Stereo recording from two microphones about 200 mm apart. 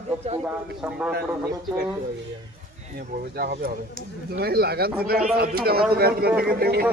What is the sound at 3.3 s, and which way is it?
Speech, 50° right (ahead or behind).